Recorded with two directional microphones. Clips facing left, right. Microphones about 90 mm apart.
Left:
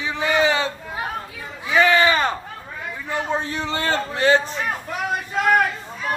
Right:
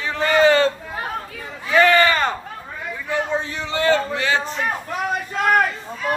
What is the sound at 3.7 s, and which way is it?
Speech, 40° left (ahead or behind).